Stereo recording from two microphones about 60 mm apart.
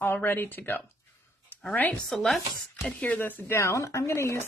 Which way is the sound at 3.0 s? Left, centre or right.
Left.